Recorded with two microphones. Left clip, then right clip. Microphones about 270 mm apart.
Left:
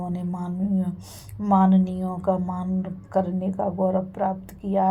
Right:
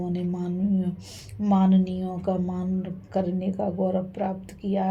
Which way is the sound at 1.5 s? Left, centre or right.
Left.